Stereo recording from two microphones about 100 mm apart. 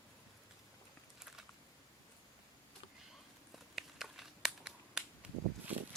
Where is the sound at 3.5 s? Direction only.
Centre (ahead or behind).